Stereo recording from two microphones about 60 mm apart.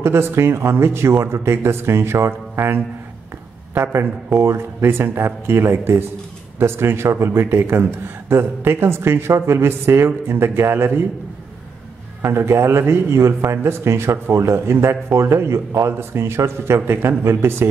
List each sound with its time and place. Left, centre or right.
0.0 s speech: right
12.2 s speech: right
15.9 s speech: right